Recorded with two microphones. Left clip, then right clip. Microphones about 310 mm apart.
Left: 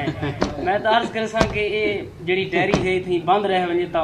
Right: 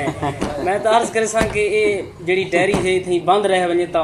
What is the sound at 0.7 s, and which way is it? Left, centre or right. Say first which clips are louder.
A man's voice: right 3 dB; centre.